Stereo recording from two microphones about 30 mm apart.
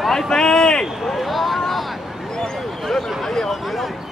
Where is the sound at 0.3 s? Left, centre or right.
Left.